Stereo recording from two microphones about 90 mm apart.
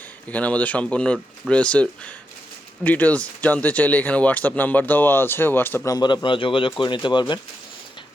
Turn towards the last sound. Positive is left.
turn(degrees=55)  # may be behind; listen again after turning